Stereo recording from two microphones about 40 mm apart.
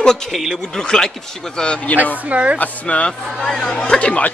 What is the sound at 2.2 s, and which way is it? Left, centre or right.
Speech, right.